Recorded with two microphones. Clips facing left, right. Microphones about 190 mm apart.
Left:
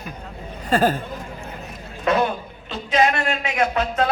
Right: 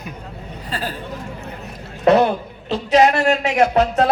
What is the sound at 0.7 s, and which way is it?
Speech, 45° left (ahead or behind).